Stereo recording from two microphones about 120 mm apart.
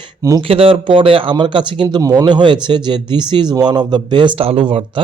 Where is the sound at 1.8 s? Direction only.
30° right (ahead or behind).